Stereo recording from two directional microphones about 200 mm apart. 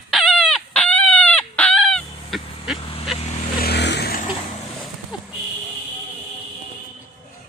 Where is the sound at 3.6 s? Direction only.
55° left (ahead or behind).